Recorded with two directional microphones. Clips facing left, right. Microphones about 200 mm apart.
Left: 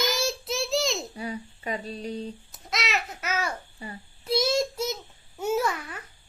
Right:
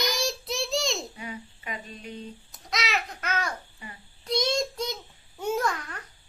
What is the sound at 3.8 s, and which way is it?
Speech, 35° left (ahead or behind).